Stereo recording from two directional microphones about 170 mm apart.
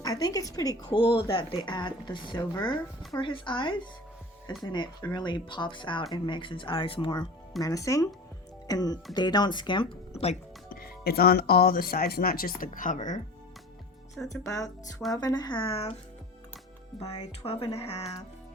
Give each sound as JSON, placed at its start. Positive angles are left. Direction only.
{"t": 0.0, "sound": "speech", "side_deg": 20}
{"t": 10.7, "sound": "speech", "side_deg": 65}
{"t": 14.4, "sound": "speech", "side_deg": 20}
{"t": 16.9, "sound": "speech", "side_deg": 0}
{"t": 17.4, "sound": "speech", "side_deg": 35}